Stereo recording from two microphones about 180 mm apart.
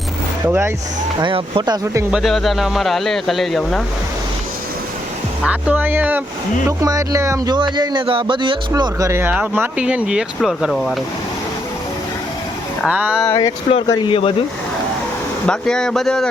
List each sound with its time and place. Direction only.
0.4 s speech: 10° right (ahead or behind)
1.2 s speech: 25° right (ahead or behind)
2.0 s speech: centre (ahead or behind)
5.4 s speech: 10° right (ahead or behind)
12.8 s speech: 5° right (ahead or behind)
13.2 s speech: 15° left (ahead or behind)
13.7 s speech: 30° left (ahead or behind)
15.4 s speech: 5° left (ahead or behind)